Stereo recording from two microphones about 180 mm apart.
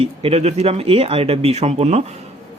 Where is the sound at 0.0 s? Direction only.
35° right (ahead or behind).